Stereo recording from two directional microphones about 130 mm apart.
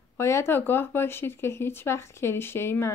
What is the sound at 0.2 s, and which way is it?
Speech, 20° left (ahead or behind).